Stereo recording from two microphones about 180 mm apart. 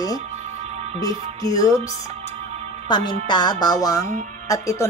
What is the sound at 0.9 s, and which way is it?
Speech, 20° left (ahead or behind).